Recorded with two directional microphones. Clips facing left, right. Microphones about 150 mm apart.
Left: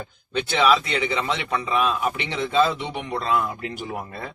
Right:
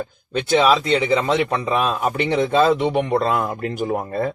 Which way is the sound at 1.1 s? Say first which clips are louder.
Right 7 dB; 45° right (ahead or behind).